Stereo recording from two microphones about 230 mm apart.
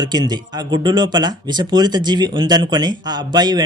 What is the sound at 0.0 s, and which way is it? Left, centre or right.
Speech, centre.